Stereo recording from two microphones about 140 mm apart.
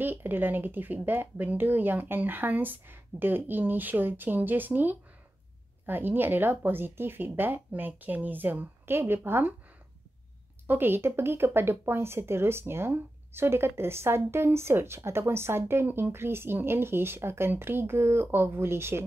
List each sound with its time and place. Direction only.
0.0 s speech: 15° right (ahead or behind)
10.7 s speech: 15° right (ahead or behind)